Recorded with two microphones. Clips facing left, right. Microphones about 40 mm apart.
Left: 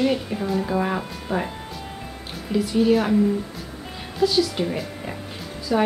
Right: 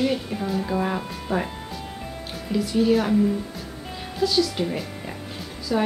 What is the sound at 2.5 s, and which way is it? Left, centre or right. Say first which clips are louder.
Speech: left 1 dB; centre.